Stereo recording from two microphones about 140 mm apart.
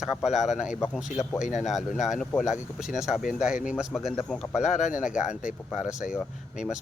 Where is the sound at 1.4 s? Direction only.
60° left (ahead or behind).